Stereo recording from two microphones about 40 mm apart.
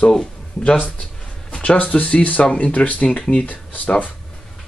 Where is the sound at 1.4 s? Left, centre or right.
Left.